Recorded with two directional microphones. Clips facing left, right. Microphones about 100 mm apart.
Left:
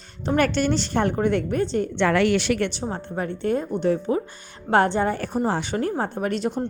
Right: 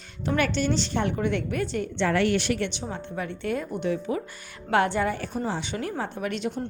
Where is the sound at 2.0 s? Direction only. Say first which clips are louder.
Left 3 dB; 85° left.